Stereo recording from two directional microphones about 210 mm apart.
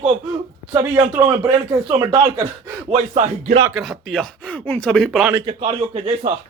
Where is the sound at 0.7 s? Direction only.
15° right (ahead or behind); by 3.6 s 30° right (ahead or behind).